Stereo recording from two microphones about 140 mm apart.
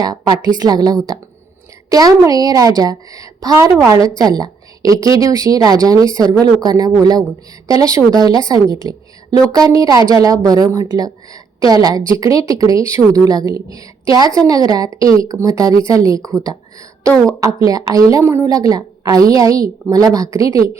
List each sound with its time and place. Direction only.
0.0 s a woman's voice: 30° right (ahead or behind)